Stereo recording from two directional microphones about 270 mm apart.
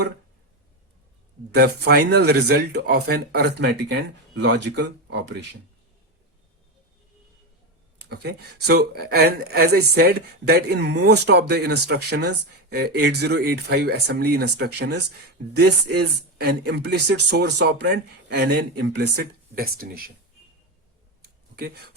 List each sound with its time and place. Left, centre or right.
1.5 s speech: right
7.9 s speech: right
21.5 s speech: right